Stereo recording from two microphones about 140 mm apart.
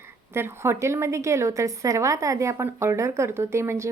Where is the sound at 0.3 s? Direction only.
15° right (ahead or behind).